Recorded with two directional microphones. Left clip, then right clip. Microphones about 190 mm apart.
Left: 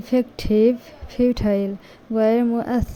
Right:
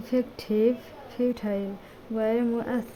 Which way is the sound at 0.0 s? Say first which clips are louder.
Left 6 dB; 20° left (ahead or behind).